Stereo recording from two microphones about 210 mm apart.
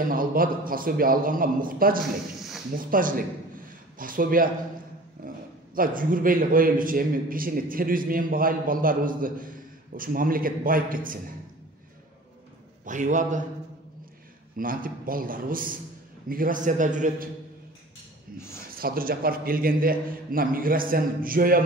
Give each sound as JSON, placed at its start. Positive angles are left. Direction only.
{"t": 0.0, "sound": "a man's voice", "side_deg": -40}
{"t": 5.8, "sound": "a man's voice", "side_deg": -40}
{"t": 12.8, "sound": "a man's voice", "side_deg": -35}
{"t": 14.6, "sound": "a man's voice", "side_deg": -40}
{"t": 18.8, "sound": "a man's voice", "side_deg": -45}